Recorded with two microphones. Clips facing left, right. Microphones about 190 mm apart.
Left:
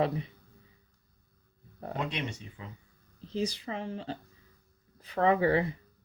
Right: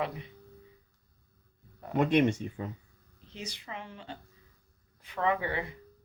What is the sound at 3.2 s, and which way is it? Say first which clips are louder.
Speech: left 10 dB; 35° left (ahead or behind).